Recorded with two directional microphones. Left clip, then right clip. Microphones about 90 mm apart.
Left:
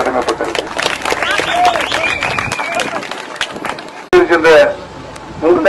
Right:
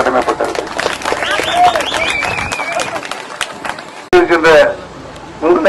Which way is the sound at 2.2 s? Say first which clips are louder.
Even; 20° left (ahead or behind).